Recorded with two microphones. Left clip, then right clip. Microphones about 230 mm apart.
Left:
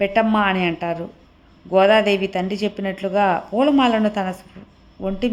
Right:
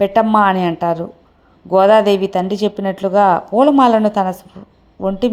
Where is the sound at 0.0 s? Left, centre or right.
Centre.